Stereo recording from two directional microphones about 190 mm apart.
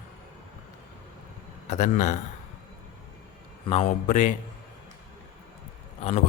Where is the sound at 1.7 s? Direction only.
40° left (ahead or behind).